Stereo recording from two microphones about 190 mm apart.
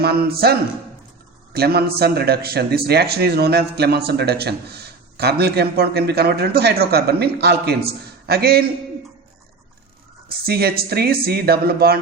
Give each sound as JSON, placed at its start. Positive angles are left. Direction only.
{"t": 0.0, "sound": "a man's voice", "side_deg": -55}
{"t": 1.5, "sound": "a man's voice", "side_deg": -55}
{"t": 10.2, "sound": "a man's voice", "side_deg": -55}